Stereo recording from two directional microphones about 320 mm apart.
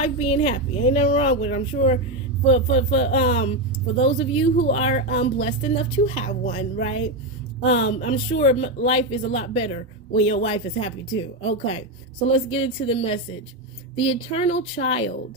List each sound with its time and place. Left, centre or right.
0.0 s speech: centre